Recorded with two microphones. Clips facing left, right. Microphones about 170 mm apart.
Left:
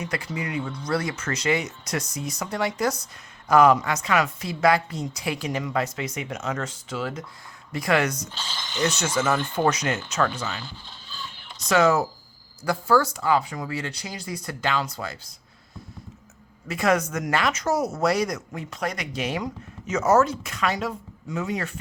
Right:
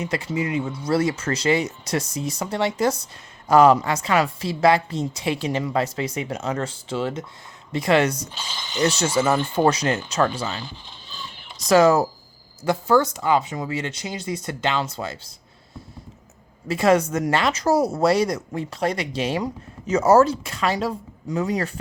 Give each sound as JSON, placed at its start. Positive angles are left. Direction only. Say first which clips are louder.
{"t": 0.0, "sound": "a woman's voice", "louder": "right 5 dB", "side_deg": -25}
{"t": 0.6, "sound": "speech", "louder": "right 3 dB", "side_deg": -5}
{"t": 0.9, "sound": "a woman's voice", "louder": "right 6 dB", "side_deg": -25}
{"t": 8.3, "sound": "speech", "louder": "right 1 dB", "side_deg": -10}
{"t": 9.0, "sound": "a woman's voice", "louder": "right 4 dB", "side_deg": -30}
{"t": 9.3, "sound": "speech", "louder": "right 4 dB", "side_deg": -15}
{"t": 9.6, "sound": "speech", "louder": "right 4 dB", "side_deg": -30}
{"t": 11.6, "sound": "speech", "louder": "right 4 dB", "side_deg": -35}
{"t": 12.6, "sound": "a woman's voice", "louder": "right 3 dB", "side_deg": -20}
{"t": 16.6, "sound": "a woman's voice", "louder": "right 5 dB", "side_deg": -30}